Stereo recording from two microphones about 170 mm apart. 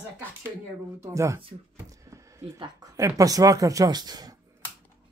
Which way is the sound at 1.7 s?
15° right (ahead or behind).